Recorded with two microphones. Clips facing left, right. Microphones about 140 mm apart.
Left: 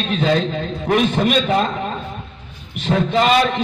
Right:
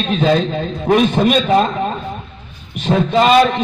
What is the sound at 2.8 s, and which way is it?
Speech, 40° right (ahead or behind).